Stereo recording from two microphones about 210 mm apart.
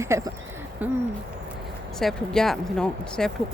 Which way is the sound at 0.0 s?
15° right (ahead or behind).